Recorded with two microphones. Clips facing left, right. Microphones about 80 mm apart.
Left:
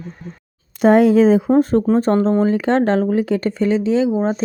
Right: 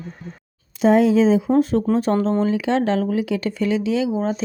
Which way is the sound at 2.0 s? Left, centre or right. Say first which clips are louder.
Left 4 dB; left.